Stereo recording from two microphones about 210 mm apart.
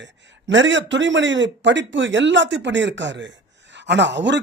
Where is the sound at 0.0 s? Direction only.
60° right (ahead or behind).